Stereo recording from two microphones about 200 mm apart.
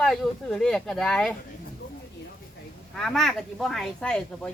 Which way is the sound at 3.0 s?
Centre (ahead or behind).